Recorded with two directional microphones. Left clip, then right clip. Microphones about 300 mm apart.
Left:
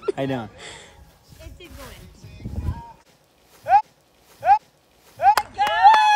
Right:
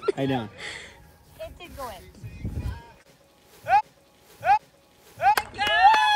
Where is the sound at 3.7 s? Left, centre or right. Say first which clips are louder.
Left 4 dB; left.